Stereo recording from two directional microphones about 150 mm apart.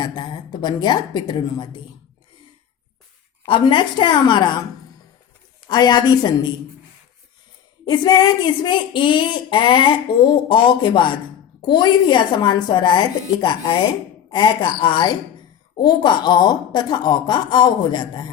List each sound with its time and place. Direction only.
0.0 s a woman's voice: 30° left (ahead or behind)
3.4 s speech: 35° left (ahead or behind)
5.6 s a woman's voice: 30° left (ahead or behind)
7.9 s a woman's voice: 30° left (ahead or behind)